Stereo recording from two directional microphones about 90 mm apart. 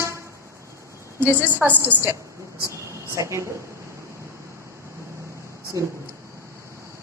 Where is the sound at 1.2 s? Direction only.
20° right (ahead or behind).